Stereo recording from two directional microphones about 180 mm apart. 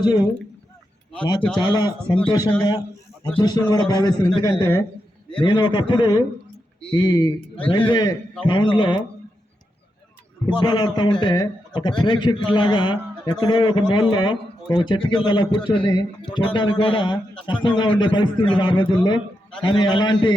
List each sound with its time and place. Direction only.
1.2 s a man's voice: 25° left (ahead or behind)
10.4 s a man's voice: 25° left (ahead or behind)